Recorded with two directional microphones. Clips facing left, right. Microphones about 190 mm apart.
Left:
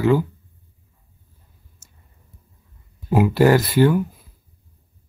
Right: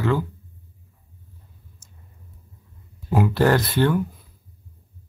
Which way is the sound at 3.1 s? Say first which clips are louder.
Left 4 dB; 10° left (ahead or behind).